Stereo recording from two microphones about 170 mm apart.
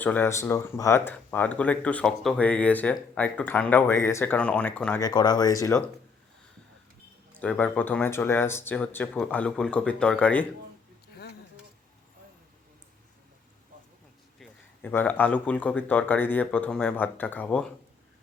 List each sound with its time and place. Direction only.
0.0 s speech: 10° left (ahead or behind)
4.9 s speech: 25° left (ahead or behind)
7.3 s speech: 10° left (ahead or behind)
14.3 s speech: 5° left (ahead or behind)